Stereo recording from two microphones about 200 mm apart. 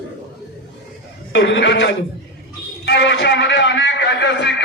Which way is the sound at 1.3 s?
60° left (ahead or behind).